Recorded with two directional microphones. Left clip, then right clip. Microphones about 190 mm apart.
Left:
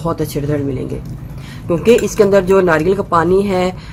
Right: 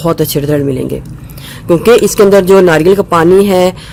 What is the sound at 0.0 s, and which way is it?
A man's voice, 50° right (ahead or behind).